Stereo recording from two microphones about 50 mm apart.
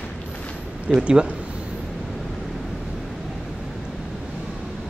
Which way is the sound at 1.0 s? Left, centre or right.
Right.